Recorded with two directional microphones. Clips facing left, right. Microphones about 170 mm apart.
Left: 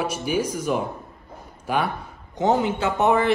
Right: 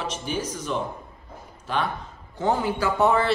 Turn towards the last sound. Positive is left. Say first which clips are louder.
# left 1 dB
turn(degrees=20)  # may be behind; listen again after turning